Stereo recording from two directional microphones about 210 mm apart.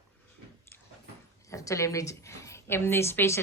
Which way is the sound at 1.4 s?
15° left (ahead or behind).